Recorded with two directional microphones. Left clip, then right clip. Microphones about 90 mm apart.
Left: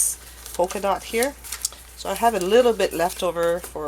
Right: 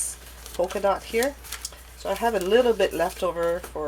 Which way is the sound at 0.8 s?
35° left (ahead or behind).